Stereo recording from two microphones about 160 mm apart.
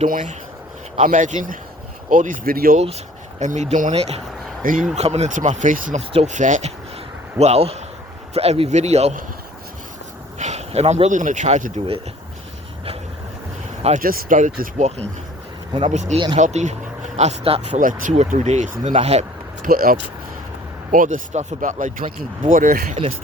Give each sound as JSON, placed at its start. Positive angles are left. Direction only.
{"t": 0.1, "sound": "speech", "side_deg": -55}
{"t": 2.7, "sound": "speech", "side_deg": -40}
{"t": 4.6, "sound": "speech", "side_deg": -55}
{"t": 4.9, "sound": "a man's voice", "side_deg": -40}
{"t": 10.3, "sound": "speech", "side_deg": -45}
{"t": 14.0, "sound": "speech", "side_deg": -60}
{"t": 15.7, "sound": "speech", "side_deg": -45}
{"t": 16.1, "sound": "a man's voice", "side_deg": -30}
{"t": 16.4, "sound": "speech", "side_deg": -45}
{"t": 19.6, "sound": "speech", "side_deg": -65}